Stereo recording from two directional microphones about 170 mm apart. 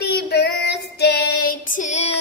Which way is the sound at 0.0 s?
70° left (ahead or behind).